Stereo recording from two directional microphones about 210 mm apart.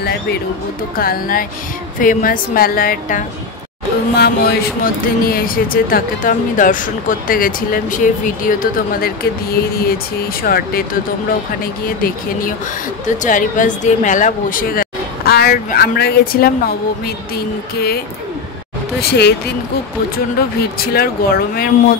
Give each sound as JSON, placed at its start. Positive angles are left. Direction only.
{"t": 0.9, "sound": "speech", "side_deg": 45}
{"t": 17.7, "sound": "speech", "side_deg": 50}